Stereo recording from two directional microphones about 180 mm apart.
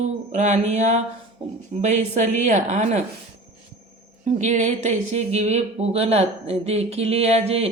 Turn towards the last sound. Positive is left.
turn(degrees=-35)  # may be behind; listen again after turning